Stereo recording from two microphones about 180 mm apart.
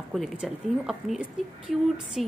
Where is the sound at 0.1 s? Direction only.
Centre (ahead or behind).